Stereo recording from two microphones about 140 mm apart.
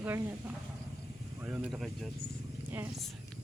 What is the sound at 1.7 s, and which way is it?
Speech, centre (ahead or behind).